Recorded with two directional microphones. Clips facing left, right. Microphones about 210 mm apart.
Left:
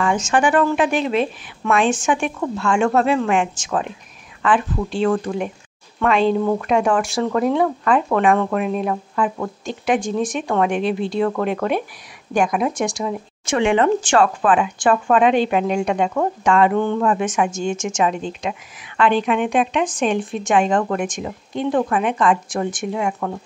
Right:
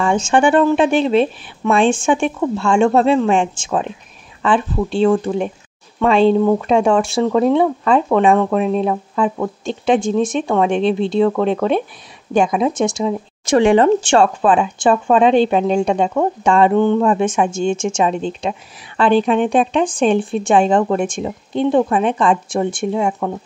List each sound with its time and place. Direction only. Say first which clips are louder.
0.0 s a woman's voice: right 4 dB; 30° right (ahead or behind)
12.4 s a woman's voice: right 4 dB; 25° right (ahead or behind)
13.5 s a woman's voice: right 5 dB; 40° right (ahead or behind)
16.7 s a woman's voice: right 5 dB; 20° right (ahead or behind)